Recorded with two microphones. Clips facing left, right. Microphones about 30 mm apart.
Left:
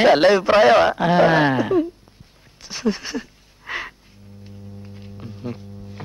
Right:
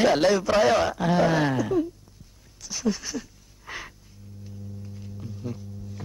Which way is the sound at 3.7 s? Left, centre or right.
Left.